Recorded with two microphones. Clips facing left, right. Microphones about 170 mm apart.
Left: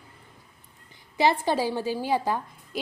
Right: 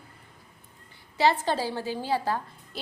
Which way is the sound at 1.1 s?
15° left (ahead or behind).